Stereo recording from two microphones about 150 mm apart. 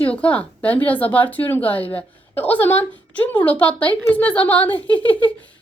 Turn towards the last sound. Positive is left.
turn(degrees=10)  # may be behind; listen again after turning